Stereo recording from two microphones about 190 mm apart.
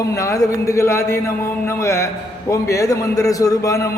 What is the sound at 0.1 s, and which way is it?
A man's voice, 15° left (ahead or behind).